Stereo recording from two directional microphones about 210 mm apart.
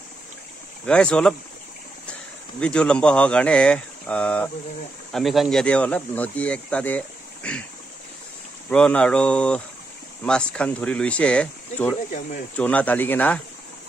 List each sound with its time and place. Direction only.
0.8 s speech: 5° left (ahead or behind)
2.6 s speech: 5° left (ahead or behind)
8.6 s speech: 5° left (ahead or behind)
12.1 s speech: 35° left (ahead or behind)
12.5 s speech: 5° left (ahead or behind)